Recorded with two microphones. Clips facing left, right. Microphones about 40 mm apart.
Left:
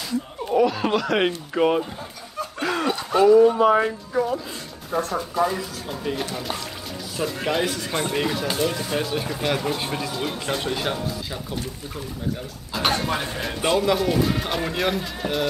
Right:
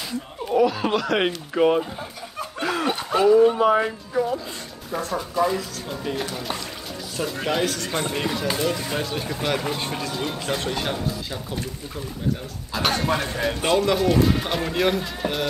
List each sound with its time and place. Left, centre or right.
0.6 s speech: centre
2.6 s a sound: centre
3.5 s speech: centre
7.6 s speech: centre
12.7 s speech: centre